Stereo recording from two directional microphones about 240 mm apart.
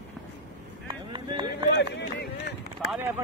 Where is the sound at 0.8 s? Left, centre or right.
Centre.